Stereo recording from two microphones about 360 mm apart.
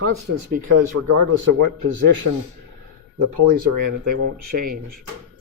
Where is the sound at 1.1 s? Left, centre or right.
Right.